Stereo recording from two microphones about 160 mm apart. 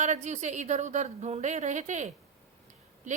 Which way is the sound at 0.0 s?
45° right (ahead or behind).